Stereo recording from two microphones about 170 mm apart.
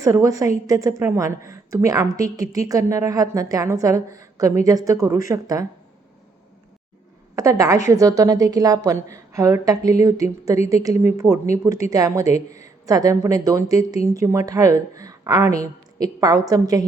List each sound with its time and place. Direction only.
0.0 s speech: 20° right (ahead or behind)
7.3 s speech: 20° right (ahead or behind)